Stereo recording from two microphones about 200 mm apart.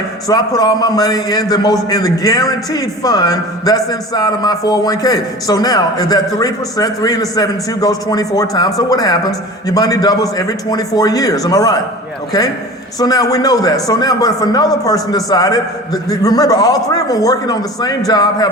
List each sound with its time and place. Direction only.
0.3 s a man's voice: 20° left (ahead or behind)
13.0 s a man's voice: 20° left (ahead or behind)